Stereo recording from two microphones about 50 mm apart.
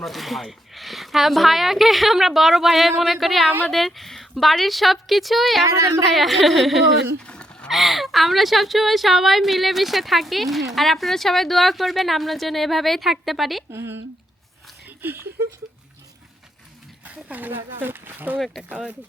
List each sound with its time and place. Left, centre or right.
0.0 s a woman's voice: centre
7.3 s a sound: centre
7.7 s a woman's voice: centre
13.7 s speech: right
14.8 s speech: right
17.2 s speech: right
18.3 s speech: centre